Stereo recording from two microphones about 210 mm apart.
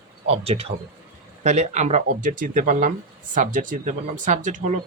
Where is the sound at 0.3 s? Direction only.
30° right (ahead or behind).